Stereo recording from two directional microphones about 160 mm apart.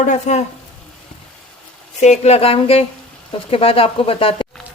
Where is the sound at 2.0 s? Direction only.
45° left (ahead or behind).